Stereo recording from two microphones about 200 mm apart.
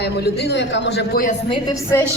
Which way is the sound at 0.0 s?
55° left (ahead or behind).